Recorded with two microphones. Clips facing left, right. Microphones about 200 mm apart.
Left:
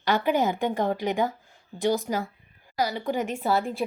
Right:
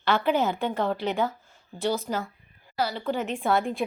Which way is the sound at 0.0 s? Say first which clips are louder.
Even; 15° left (ahead or behind).